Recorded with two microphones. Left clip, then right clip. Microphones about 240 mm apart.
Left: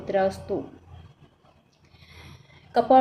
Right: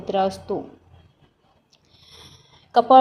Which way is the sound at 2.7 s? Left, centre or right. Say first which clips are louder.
Right 5 dB; centre.